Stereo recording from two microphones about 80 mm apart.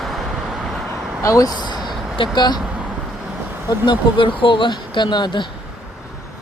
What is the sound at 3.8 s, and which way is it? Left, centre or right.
Speech, left.